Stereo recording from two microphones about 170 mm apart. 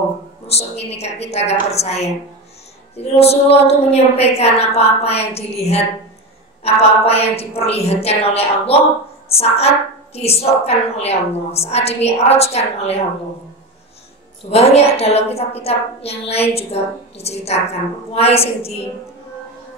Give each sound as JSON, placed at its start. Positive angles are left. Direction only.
{"t": 0.5, "sound": "a woman's voice", "side_deg": 40}
{"t": 14.5, "sound": "a woman's voice", "side_deg": 40}